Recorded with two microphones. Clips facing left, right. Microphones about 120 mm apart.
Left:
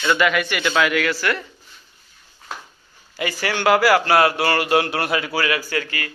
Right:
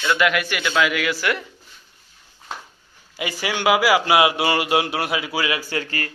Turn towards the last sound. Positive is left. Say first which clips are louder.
# left 1 dB
turn(degrees=-35)  # may be behind; listen again after turning